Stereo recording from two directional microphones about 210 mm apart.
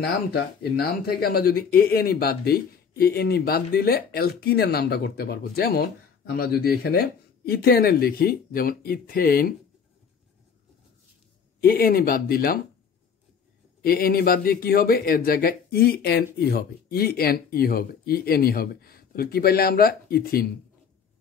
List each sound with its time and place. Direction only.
0.0 s speech: 45° left (ahead or behind)
11.6 s speech: 45° left (ahead or behind)
13.8 s speech: 45° left (ahead or behind)